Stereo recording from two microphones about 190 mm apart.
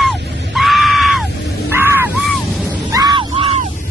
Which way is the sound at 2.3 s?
5° left (ahead or behind).